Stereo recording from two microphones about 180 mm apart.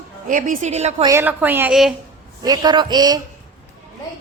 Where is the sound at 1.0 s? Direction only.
10° right (ahead or behind).